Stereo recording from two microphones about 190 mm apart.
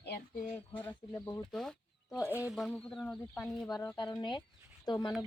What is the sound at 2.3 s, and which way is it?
Speech, 10° right (ahead or behind).